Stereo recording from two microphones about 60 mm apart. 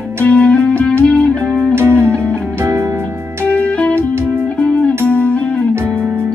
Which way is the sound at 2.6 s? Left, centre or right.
Right.